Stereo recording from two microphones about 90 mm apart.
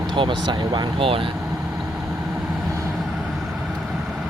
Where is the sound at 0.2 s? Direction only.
60° right (ahead or behind); by 1.2 s 85° right.